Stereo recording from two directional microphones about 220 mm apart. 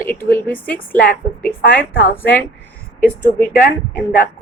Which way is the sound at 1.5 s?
40° left (ahead or behind).